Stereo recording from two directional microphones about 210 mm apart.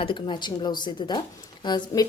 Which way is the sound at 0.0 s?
25° left (ahead or behind).